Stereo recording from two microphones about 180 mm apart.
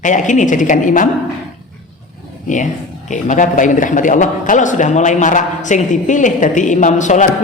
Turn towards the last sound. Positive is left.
turn(degrees=45)  # may be behind; listen again after turning